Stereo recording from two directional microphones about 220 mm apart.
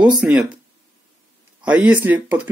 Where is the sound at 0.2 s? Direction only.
5° right (ahead or behind).